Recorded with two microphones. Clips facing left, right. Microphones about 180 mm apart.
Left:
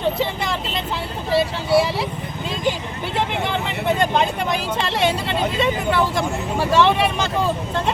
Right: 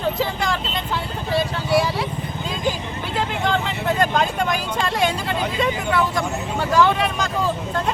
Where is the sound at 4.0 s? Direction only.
25° left (ahead or behind).